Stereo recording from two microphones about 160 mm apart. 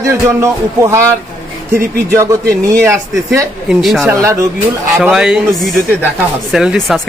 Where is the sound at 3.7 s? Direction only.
Centre (ahead or behind).